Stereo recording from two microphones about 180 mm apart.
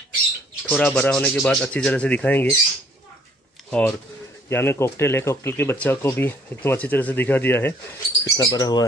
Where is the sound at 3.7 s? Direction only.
5° left (ahead or behind).